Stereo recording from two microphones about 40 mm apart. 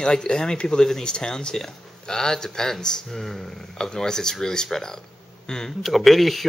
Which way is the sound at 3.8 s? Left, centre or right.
Centre.